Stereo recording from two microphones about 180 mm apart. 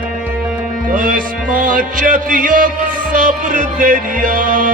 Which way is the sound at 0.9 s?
50° right (ahead or behind).